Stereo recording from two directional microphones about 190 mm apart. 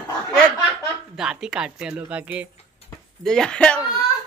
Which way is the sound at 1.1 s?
5° right (ahead or behind).